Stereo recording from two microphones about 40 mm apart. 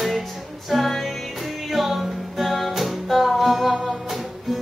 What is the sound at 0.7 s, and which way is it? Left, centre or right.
Music, centre.